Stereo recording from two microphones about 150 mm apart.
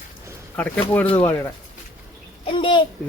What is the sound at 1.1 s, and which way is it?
Speech, 35° left (ahead or behind).